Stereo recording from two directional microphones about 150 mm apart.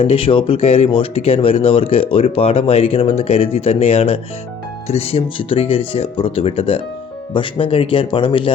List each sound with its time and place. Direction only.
0.0 s speech: 40° left (ahead or behind)